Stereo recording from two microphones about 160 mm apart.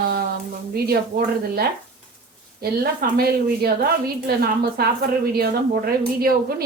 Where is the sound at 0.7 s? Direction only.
70° right (ahead or behind).